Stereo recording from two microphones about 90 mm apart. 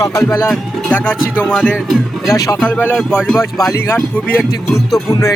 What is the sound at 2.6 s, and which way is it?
Speech, 15° left (ahead or behind).